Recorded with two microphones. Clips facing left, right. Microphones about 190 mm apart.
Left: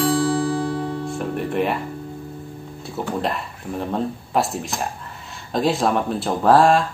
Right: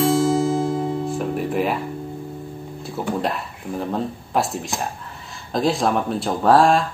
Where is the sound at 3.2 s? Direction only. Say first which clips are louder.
Even; centre (ahead or behind).